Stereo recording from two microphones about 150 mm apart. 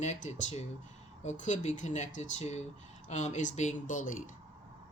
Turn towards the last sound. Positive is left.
turn(degrees=60)  # may be behind; listen again after turning